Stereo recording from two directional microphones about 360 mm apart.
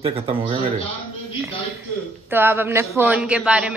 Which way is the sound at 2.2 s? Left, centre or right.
Centre.